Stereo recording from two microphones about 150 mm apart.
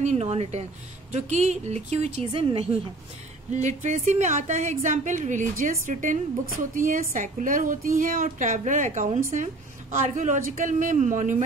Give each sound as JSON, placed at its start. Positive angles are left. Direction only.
{"t": 0.0, "sound": "a woman's voice", "side_deg": -45}
{"t": 3.6, "sound": "a woman's voice", "side_deg": -55}